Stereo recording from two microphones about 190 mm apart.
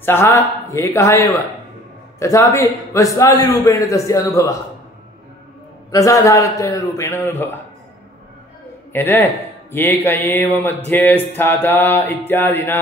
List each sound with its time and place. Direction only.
0.0 s speech: 15° left (ahead or behind)
5.9 s speech: 15° left (ahead or behind)
8.9 s speech: 10° left (ahead or behind)